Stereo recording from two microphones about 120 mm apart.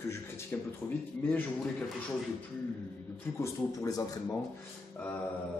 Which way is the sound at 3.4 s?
30° left (ahead or behind).